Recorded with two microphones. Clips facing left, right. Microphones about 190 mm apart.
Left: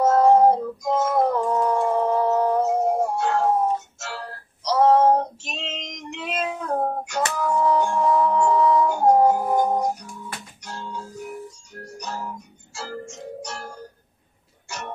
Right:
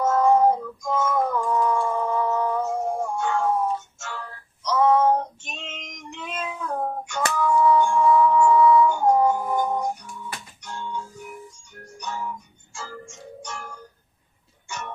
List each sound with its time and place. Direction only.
0.0 s music: 40° left (ahead or behind)
5.5 s female singing: 35° left (ahead or behind)
6.5 s meow: 40° left (ahead or behind)
7.3 s music: 40° left (ahead or behind)